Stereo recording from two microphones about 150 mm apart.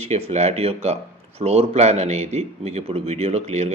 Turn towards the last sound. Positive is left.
turn(degrees=-45)  # may be behind; listen again after turning